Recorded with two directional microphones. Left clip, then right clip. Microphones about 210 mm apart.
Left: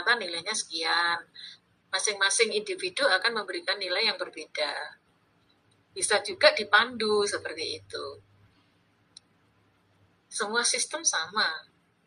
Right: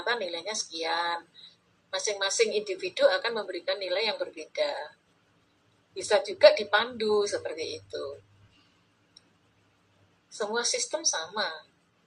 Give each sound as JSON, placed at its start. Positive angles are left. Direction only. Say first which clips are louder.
{"t": 0.0, "sound": "a woman's voice", "louder": "left 3 dB", "side_deg": 25}
{"t": 5.9, "sound": "a woman's voice", "louder": "right 1 dB", "side_deg": 30}
{"t": 10.3, "sound": "a woman's voice", "louder": "left 2 dB", "side_deg": 30}